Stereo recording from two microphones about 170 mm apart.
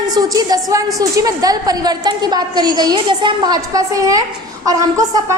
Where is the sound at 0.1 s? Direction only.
25° right (ahead or behind).